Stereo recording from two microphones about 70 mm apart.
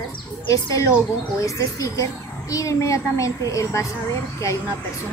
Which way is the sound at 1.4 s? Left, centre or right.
Left.